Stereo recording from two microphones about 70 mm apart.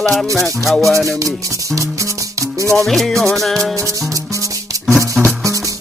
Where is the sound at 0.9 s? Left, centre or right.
Right.